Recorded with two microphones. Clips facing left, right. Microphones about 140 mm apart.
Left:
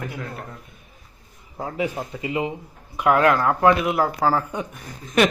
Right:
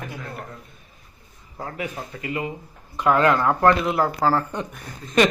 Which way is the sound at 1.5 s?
20° left (ahead or behind).